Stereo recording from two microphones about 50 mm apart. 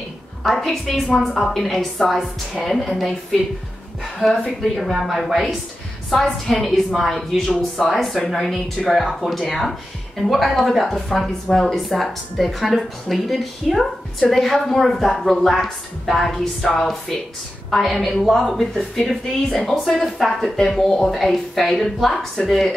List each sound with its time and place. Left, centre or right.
0.4 s speech: centre
4.4 s speech: centre
6.2 s a woman's voice: centre
6.6 s speech: centre